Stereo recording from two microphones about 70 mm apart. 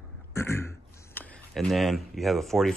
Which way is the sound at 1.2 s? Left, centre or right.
Left.